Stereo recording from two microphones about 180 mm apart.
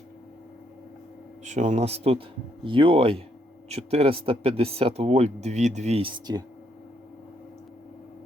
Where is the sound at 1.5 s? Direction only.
40° right (ahead or behind).